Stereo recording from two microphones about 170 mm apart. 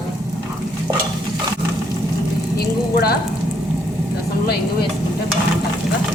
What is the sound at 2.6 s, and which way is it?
Frying, 65° left (ahead or behind).